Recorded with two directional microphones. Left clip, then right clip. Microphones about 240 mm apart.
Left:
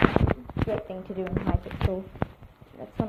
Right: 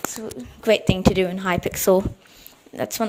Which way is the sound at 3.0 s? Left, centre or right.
Right.